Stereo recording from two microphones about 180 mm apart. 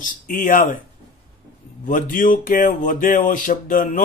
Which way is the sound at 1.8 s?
50° left (ahead or behind).